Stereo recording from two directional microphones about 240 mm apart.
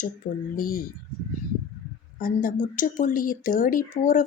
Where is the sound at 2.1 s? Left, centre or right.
Left.